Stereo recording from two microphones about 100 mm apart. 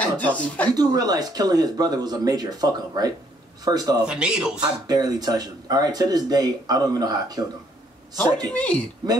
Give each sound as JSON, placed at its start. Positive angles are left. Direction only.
{"t": 0.0, "sound": "speech", "side_deg": 15}
{"t": 0.7, "sound": "speech", "side_deg": -40}
{"t": 4.0, "sound": "speech", "side_deg": -10}
{"t": 4.6, "sound": "speech", "side_deg": -40}
{"t": 8.5, "sound": "speech", "side_deg": 15}